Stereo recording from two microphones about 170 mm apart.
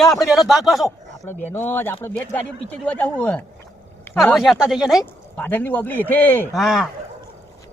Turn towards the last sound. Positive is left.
turn(degrees=0)  # may be behind; listen again after turning